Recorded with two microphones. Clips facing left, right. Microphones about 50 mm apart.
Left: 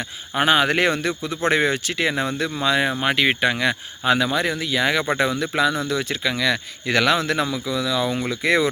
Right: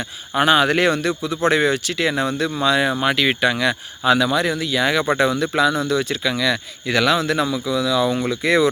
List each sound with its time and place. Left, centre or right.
0.3 s speech: left
5.1 s speech: left